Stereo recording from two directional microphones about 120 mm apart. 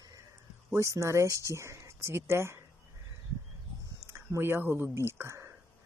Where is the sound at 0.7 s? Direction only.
25° right (ahead or behind).